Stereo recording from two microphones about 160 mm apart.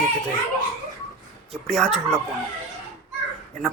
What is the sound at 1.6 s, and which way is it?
Speech, 5° left (ahead or behind).